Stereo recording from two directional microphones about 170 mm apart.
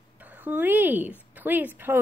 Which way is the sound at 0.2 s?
10° right (ahead or behind).